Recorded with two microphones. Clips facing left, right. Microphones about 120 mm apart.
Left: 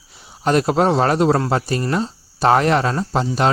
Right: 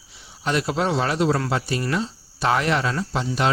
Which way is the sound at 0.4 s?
45° left (ahead or behind).